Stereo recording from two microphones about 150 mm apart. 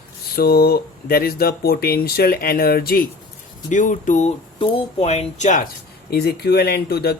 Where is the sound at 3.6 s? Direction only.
55° left (ahead or behind).